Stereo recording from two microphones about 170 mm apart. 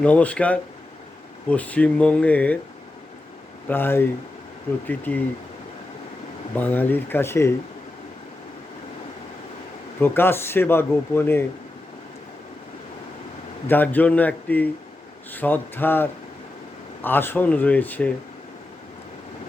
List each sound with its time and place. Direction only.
0.0 s speech: 10° left (ahead or behind)
3.7 s speech: 10° left (ahead or behind)
6.6 s speech: 10° left (ahead or behind)
10.0 s speech: 15° left (ahead or behind)
13.7 s speech: 10° left (ahead or behind)